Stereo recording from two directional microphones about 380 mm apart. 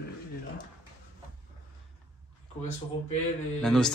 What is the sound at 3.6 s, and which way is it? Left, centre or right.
Speech, centre.